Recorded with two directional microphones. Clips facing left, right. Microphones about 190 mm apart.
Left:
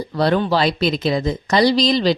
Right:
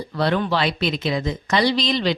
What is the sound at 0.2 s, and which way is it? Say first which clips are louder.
A woman's voice: left 4 dB; 35° left (ahead or behind).